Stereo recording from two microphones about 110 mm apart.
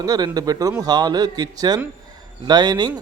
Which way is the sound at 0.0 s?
35° right (ahead or behind).